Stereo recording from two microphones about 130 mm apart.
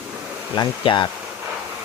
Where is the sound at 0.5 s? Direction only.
40° left (ahead or behind).